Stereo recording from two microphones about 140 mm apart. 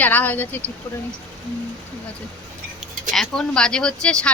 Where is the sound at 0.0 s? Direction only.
10° left (ahead or behind).